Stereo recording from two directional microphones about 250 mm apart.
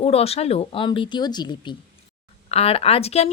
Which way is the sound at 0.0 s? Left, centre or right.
Left.